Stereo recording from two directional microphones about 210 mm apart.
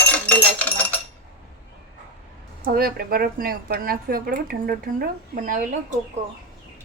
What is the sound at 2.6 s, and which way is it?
Speech, 45° right (ahead or behind).